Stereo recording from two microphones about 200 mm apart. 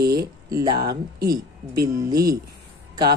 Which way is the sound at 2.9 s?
20° right (ahead or behind).